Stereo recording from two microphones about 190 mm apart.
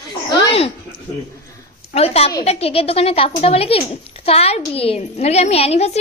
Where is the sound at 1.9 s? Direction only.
30° left (ahead or behind).